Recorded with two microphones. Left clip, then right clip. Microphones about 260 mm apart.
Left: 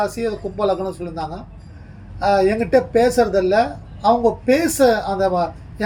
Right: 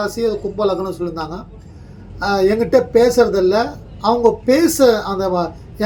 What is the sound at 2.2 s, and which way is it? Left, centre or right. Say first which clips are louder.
Speech: right 1 dB; centre.